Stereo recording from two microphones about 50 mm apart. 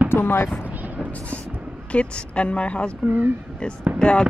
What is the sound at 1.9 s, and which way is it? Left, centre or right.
Speech, left.